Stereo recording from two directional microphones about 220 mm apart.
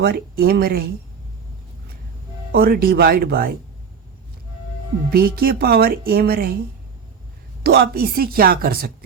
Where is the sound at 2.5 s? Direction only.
45° right (ahead or behind).